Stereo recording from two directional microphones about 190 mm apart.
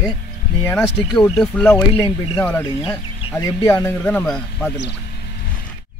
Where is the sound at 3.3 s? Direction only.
15° left (ahead or behind).